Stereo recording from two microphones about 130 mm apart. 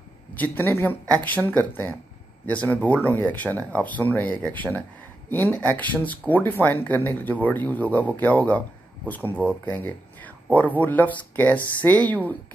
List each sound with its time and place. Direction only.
0.4 s speech: 15° left (ahead or behind)